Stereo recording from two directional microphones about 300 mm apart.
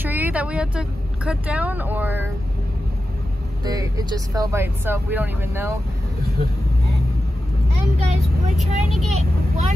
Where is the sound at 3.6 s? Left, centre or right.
Centre.